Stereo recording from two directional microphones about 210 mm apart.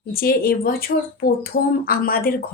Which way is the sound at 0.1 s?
45° left (ahead or behind).